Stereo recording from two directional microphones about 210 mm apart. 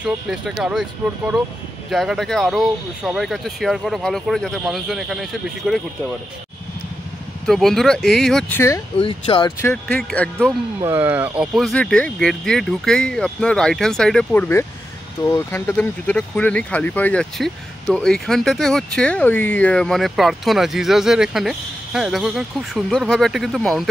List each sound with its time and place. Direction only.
0.0 s speech: 5° right (ahead or behind)
7.4 s speech: centre (ahead or behind)
8.9 s speech: 25° left (ahead or behind)
9.6 s speech: 10° left (ahead or behind)
10.8 s speech: 10° right (ahead or behind)